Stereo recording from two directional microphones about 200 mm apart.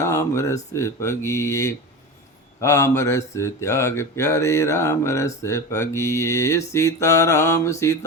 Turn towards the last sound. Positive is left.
turn(degrees=15)  # may be behind; listen again after turning